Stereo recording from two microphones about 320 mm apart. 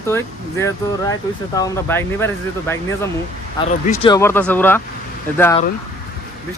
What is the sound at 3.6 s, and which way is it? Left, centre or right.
Speech, centre.